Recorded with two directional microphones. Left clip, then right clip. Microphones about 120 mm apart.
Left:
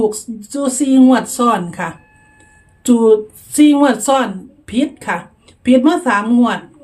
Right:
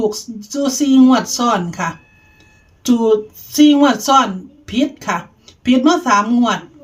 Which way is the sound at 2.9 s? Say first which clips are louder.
Left 3 dB; 15° left (ahead or behind).